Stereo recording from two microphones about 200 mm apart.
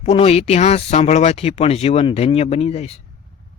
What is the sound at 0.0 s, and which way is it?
A man's voice, 30° left (ahead or behind).